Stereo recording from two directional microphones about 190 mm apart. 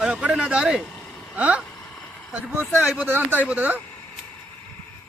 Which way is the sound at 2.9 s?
10° right (ahead or behind).